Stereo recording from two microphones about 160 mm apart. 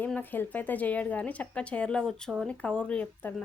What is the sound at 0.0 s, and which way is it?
Speech, 10° left (ahead or behind).